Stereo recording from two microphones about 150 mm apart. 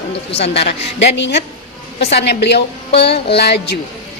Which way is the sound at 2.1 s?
90° left.